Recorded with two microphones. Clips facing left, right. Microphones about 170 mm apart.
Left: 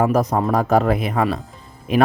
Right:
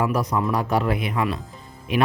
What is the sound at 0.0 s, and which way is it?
Speech, 45° left (ahead or behind).